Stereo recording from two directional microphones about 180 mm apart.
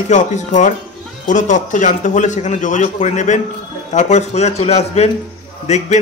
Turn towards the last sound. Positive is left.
turn(degrees=40)  # may be behind; listen again after turning